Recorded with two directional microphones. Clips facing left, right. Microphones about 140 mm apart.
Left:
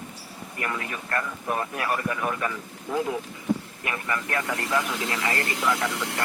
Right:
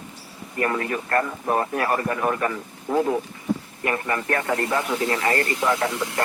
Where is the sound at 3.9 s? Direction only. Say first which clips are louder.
Right 6 dB; 45° right (ahead or behind).